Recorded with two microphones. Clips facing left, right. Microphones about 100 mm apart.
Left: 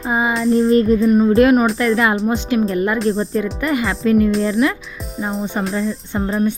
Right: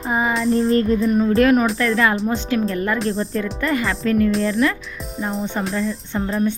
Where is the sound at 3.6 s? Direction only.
15° left (ahead or behind).